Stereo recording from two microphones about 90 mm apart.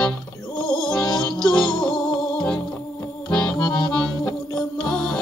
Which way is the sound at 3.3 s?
15° left (ahead or behind).